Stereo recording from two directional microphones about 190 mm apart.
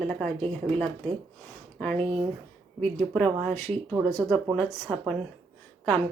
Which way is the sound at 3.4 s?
5° left (ahead or behind).